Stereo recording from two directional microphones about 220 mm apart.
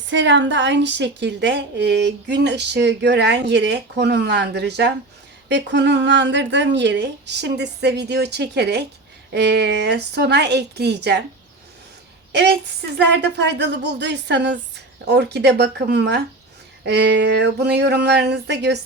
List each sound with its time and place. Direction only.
0.1 s a woman's voice: 55° right (ahead or behind)
12.3 s a woman's voice: 50° right (ahead or behind)